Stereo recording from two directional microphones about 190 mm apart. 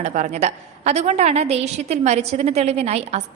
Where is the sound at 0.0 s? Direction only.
40° right (ahead or behind).